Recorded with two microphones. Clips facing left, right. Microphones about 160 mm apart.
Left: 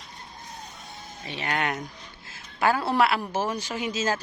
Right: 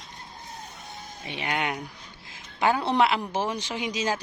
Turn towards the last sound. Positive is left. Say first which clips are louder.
# left 1 dB
turn(degrees=-15)  # may be behind; listen again after turning